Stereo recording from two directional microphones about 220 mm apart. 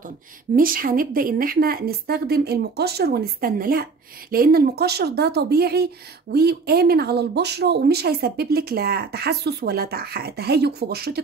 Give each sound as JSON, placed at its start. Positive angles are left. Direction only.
{"t": 0.6, "sound": "speech", "side_deg": -40}